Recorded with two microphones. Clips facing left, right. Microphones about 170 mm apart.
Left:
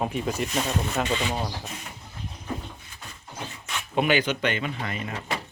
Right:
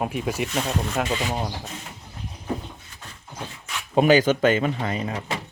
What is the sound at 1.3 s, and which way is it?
Speech, 15° right (ahead or behind).